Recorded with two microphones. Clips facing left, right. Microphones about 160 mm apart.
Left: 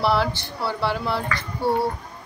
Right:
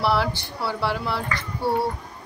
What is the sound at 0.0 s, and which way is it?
Speech, 5° right (ahead or behind).